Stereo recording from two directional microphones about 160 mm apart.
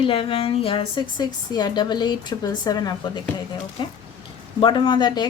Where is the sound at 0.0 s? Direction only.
35° left (ahead or behind).